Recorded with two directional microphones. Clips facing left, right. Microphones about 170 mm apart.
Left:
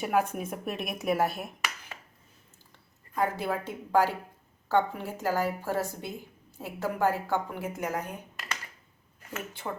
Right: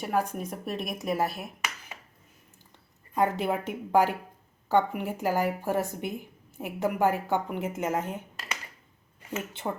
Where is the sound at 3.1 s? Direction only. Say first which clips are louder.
Right 3 dB; 20° right (ahead or behind).